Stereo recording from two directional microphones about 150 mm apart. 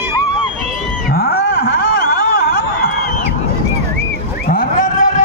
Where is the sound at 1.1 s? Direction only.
90° left.